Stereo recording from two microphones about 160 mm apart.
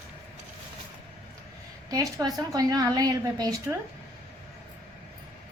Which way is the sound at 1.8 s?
25° right (ahead or behind).